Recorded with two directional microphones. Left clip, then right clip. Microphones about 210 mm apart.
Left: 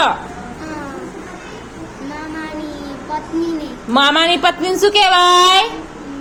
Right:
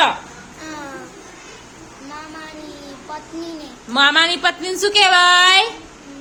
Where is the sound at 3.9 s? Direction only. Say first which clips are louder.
Left 2 dB; 10° right (ahead or behind).